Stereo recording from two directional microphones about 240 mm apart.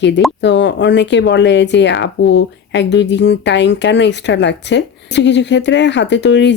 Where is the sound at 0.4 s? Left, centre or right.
Left.